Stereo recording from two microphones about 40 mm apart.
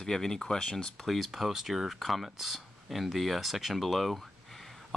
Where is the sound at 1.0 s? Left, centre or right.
Centre.